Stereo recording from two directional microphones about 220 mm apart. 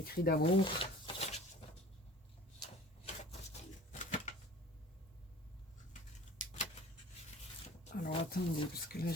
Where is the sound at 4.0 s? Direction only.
35° left (ahead or behind).